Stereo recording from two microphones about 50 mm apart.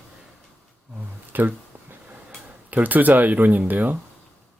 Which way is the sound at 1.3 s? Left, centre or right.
Right.